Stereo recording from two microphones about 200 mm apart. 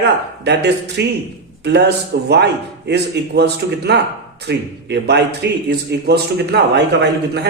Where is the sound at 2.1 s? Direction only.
55° right (ahead or behind).